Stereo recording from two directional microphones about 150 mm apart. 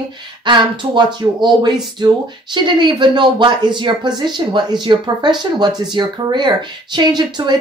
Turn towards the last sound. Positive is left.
turn(degrees=-30)  # may be behind; listen again after turning